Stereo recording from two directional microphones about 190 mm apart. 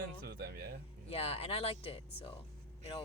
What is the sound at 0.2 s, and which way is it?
Speech, 55° right (ahead or behind).